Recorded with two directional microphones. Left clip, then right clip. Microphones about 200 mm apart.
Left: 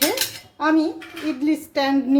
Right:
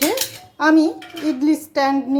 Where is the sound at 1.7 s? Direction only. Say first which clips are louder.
Right 3 dB; 5° right (ahead or behind).